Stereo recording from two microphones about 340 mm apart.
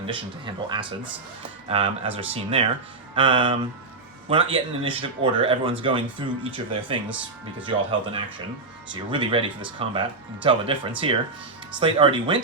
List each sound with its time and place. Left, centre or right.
0.1 s speech: centre